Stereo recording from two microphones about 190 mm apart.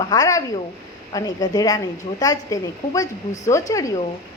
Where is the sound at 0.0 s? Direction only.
20° left (ahead or behind).